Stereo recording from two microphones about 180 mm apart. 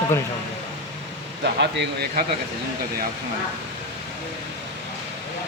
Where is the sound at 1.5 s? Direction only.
70° right (ahead or behind).